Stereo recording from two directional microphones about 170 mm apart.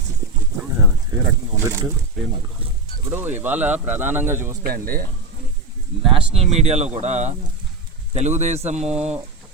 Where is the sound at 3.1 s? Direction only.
10° right (ahead or behind).